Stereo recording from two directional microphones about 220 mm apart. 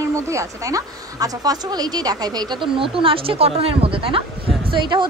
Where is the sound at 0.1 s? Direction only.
15° right (ahead or behind).